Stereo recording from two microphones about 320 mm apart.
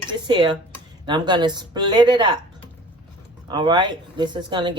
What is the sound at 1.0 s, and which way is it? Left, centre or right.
Speech, centre.